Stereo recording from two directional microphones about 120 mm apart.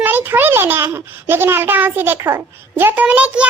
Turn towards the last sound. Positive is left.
turn(degrees=-10)  # may be behind; listen again after turning